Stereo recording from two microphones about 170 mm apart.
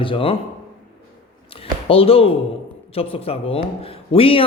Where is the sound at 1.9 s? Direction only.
35° left (ahead or behind).